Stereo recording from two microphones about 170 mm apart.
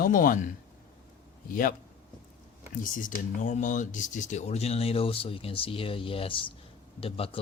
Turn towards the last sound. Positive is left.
turn(degrees=35)  # may be behind; listen again after turning